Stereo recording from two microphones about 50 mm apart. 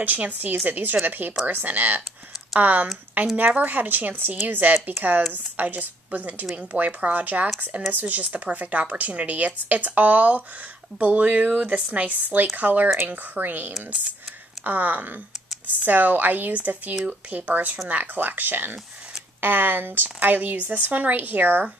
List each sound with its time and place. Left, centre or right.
0.0 s speech: right